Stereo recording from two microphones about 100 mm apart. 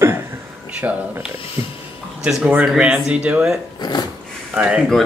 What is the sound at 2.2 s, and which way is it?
Speech, 5° right (ahead or behind).